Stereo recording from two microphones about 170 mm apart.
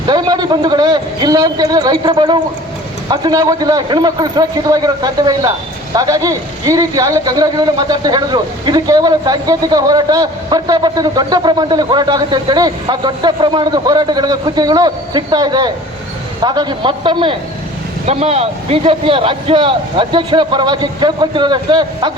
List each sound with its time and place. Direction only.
0.1 s speech: 25° right (ahead or behind)